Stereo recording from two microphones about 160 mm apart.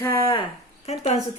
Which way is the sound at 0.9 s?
45° left (ahead or behind).